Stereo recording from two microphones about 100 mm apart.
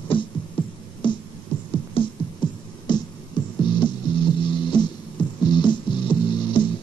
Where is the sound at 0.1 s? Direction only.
60° left (ahead or behind).